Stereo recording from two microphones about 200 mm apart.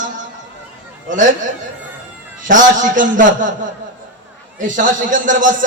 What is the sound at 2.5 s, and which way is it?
A man's voice, 40° right (ahead or behind).